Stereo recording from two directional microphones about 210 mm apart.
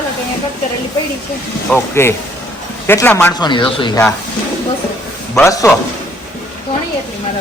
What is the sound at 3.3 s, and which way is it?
Speech, 20° left (ahead or behind).